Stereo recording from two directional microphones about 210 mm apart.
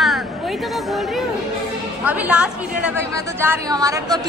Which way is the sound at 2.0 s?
5° right (ahead or behind).